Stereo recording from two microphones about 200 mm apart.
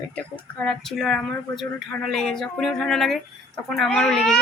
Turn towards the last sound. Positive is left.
turn(degrees=0)  # may be behind; listen again after turning